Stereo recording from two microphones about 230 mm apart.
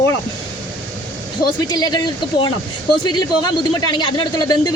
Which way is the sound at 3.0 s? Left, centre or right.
Centre.